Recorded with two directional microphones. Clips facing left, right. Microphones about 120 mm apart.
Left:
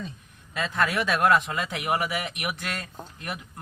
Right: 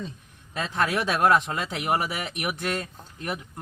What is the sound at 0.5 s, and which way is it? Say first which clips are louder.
Speech: even; 30° right (ahead or behind).